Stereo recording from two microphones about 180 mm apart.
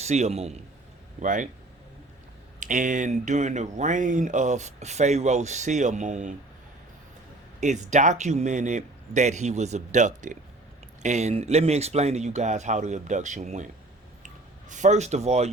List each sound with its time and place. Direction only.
0.0 s speech: 35° right (ahead or behind)
2.6 s speech: 45° right (ahead or behind)
7.6 s speech: 40° right (ahead or behind)
14.7 s speech: 40° right (ahead or behind)